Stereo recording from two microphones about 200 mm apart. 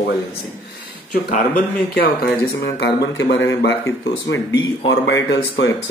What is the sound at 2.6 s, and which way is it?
Speech, 55° left (ahead or behind).